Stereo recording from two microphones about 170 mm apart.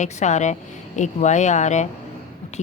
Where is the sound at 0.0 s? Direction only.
45° left (ahead or behind).